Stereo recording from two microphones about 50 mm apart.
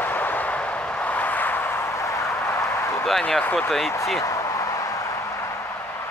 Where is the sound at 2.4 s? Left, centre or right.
Left.